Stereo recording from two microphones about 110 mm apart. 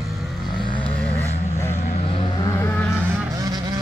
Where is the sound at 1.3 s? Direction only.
90° left.